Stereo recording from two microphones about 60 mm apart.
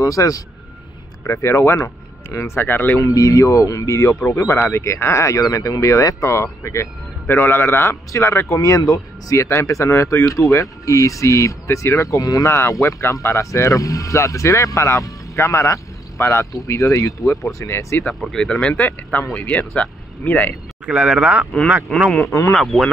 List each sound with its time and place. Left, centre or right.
0.0 s speech: left
1.2 s a man's voice: left
3.0 s speech: left
4.4 s speech: left
5.4 s speech: left
7.2 s a man's voice: left
8.1 s speech: left
12.8 s speech: left
16.5 s speech: left
17.6 s speech: left
18.2 s speech: centre
19.3 s speech: left
20.8 s speech: centre
21.9 s speech: centre